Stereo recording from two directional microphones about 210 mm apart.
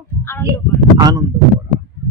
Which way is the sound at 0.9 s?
20° right (ahead or behind).